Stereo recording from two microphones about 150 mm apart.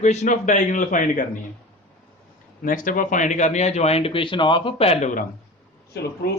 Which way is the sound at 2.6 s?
65° left (ahead or behind).